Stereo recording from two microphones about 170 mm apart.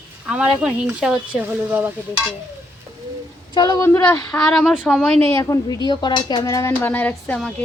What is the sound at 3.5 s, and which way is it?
Speech, 20° left (ahead or behind).